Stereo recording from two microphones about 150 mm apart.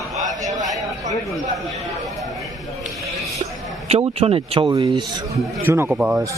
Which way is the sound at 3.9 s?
40° right (ahead or behind).